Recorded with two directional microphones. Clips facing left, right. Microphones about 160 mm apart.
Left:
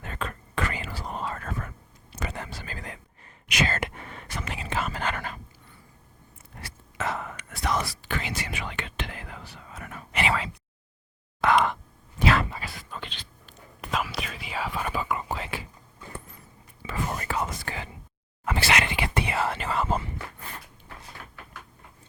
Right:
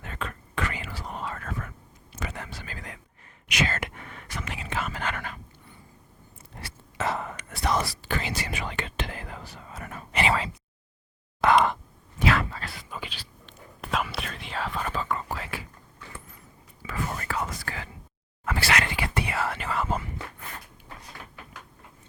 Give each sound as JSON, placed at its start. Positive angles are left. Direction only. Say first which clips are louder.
{"t": 0.0, "sound": "whispering", "louder": "left 1 dB", "side_deg": 40}
{"t": 6.6, "sound": "whispering", "louder": "right 2 dB", "side_deg": -30}
{"t": 11.3, "sound": "a sound", "louder": "right 2 dB", "side_deg": -35}
{"t": 12.2, "sound": "a sound", "louder": "left 1 dB", "side_deg": 30}
{"t": 12.6, "sound": "whispering", "louder": "right 1 dB", "side_deg": -5}
{"t": 15.3, "sound": "whispering", "louder": "left 2 dB", "side_deg": 25}
{"t": 16.8, "sound": "whispering", "louder": "left 1 dB", "side_deg": 25}